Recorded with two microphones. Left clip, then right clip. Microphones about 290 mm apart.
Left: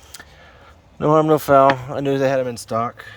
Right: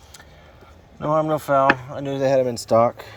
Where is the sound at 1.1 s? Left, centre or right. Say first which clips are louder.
Left 5 dB; left; by 3.1 s centre.